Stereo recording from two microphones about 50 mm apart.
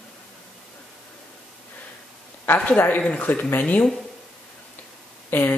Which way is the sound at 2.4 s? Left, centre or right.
Left.